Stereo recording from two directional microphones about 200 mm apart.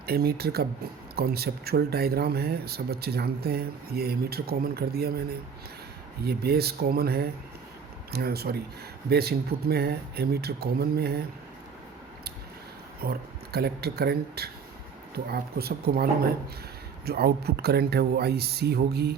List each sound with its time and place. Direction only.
0.0 s speech: 50° right (ahead or behind)
13.0 s speech: 50° right (ahead or behind)